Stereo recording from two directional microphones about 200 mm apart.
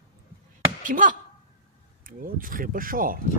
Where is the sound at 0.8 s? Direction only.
40° right (ahead or behind).